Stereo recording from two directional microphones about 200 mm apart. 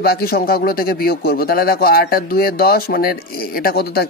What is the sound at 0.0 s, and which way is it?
A man's voice, 50° left (ahead or behind).